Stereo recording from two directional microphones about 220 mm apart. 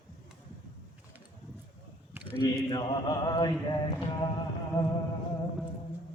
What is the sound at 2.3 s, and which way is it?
Mantra, 20° left (ahead or behind).